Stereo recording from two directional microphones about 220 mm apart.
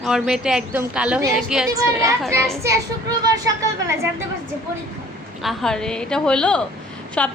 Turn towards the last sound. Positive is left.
turn(degrees=5)  # may be behind; listen again after turning